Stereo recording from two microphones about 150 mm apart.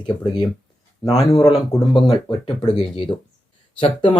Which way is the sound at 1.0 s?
25° left (ahead or behind).